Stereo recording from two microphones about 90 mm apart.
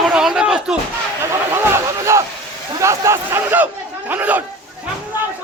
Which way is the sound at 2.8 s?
35° right (ahead or behind).